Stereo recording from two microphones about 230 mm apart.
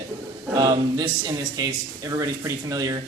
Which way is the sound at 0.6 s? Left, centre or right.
Centre.